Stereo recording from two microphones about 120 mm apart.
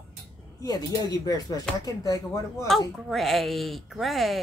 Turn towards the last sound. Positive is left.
turn(degrees=0)  # may be behind; listen again after turning